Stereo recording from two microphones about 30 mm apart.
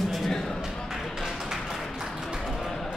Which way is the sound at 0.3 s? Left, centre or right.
Centre.